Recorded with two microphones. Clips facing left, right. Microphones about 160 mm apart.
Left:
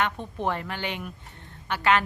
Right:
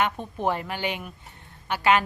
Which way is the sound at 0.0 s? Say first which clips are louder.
Right 2 dB; 10° right (ahead or behind).